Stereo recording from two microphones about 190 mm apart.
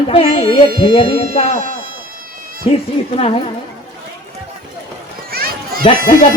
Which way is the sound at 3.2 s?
30° left (ahead or behind).